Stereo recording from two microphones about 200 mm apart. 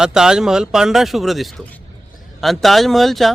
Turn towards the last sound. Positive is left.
turn(degrees=0)  # may be behind; listen again after turning